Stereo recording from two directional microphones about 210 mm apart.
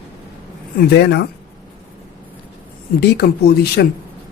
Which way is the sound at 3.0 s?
50° left (ahead or behind).